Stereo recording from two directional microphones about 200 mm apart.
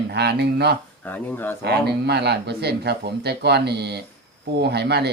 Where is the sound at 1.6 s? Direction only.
55° right (ahead or behind).